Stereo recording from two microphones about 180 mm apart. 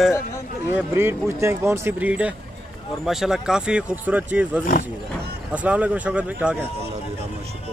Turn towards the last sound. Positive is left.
turn(degrees=-10)  # may be behind; listen again after turning